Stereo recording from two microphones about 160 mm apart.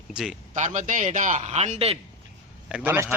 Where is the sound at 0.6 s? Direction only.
50° right (ahead or behind).